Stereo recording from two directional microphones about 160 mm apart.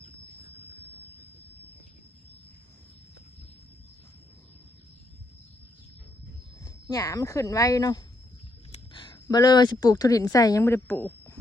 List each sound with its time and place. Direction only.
6.7 s a woman's voice: 20° left (ahead or behind)